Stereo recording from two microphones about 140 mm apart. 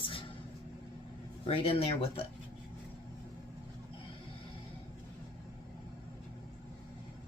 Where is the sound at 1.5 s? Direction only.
45° left (ahead or behind).